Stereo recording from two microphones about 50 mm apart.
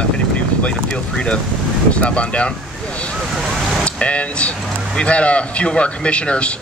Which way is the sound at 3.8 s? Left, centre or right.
Left.